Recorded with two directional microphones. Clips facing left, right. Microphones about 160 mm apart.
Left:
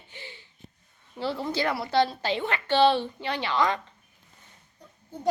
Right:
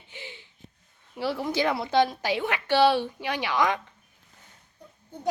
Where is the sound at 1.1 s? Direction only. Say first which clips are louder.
Right 1 dB; 10° right (ahead or behind).